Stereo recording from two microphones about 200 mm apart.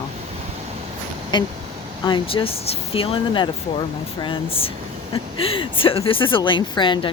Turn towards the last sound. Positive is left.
turn(degrees=25)  # may be behind; listen again after turning